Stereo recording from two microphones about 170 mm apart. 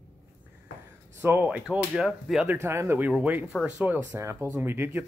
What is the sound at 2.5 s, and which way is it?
Speech, 15° right (ahead or behind).